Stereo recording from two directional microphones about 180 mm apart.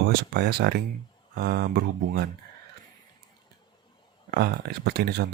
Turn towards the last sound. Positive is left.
turn(degrees=-60)  # may be behind; listen again after turning